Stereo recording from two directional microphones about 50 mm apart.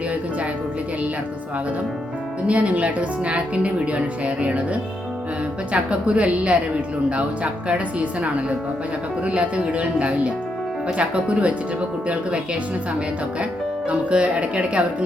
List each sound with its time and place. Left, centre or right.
2.5 s speech: right
14.0 s speech: right